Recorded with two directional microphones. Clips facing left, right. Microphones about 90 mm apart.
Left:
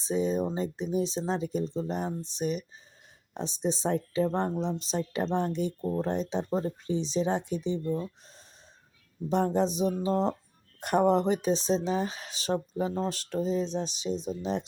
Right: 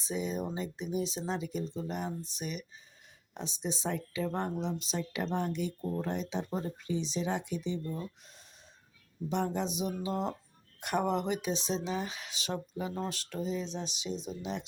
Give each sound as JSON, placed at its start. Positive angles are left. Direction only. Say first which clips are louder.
{"t": 0.0, "sound": "speech", "louder": "left 7 dB", "side_deg": 35}
{"t": 9.3, "sound": "speech", "louder": "left 7 dB", "side_deg": 35}